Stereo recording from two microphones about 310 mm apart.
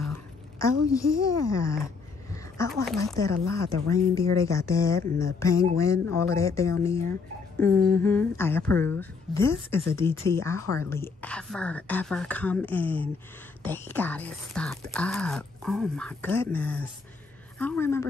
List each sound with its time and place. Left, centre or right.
0.0 s a woman's voice: centre
2.3 s a sound: centre
3.0 s speech: centre
3.3 s speech: right
3.9 s speech: centre
7.7 s speech: right
8.0 s speech: centre